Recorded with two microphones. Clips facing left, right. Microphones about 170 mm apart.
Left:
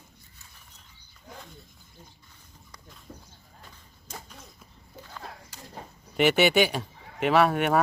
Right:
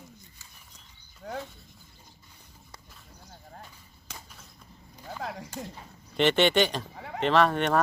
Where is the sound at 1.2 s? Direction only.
70° right (ahead or behind).